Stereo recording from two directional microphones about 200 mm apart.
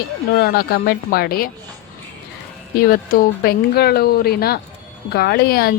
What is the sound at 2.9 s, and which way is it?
Speech, 45° left (ahead or behind).